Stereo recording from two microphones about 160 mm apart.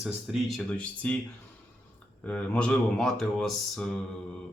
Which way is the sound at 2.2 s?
10° left (ahead or behind).